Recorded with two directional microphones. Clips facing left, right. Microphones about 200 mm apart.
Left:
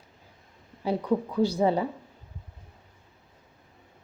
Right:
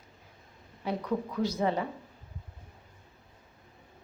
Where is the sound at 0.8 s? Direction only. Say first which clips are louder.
Left 5 dB; 30° left (ahead or behind).